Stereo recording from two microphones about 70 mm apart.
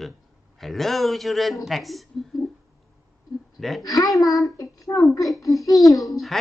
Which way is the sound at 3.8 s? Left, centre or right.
Left.